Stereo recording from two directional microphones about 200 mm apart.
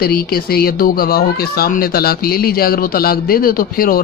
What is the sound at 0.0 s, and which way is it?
A man's voice, 50° left (ahead or behind).